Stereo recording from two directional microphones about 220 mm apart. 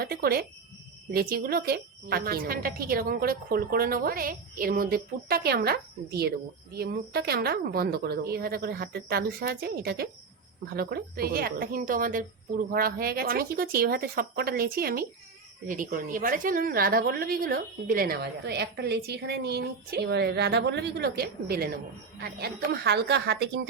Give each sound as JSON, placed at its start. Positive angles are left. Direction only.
{"t": 0.0, "sound": "a woman's voice", "side_deg": -45}